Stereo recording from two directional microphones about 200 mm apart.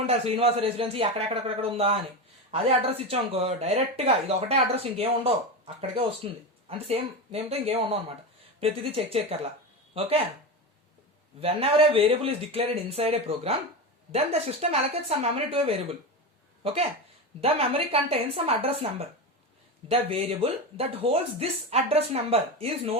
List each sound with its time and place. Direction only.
0.1 s speech: 30° right (ahead or behind)
11.3 s a woman's voice: 30° right (ahead or behind)